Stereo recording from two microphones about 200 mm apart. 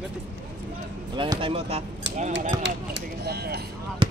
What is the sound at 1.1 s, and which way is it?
Speech, 25° right (ahead or behind).